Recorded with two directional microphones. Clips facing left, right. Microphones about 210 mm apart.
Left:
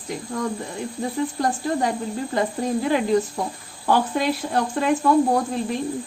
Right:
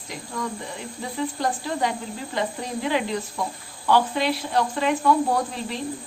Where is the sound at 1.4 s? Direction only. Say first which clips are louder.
Left 2 dB; 45° left (ahead or behind).